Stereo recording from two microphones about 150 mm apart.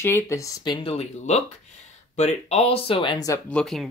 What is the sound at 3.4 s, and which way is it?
Speech, 5° left (ahead or behind).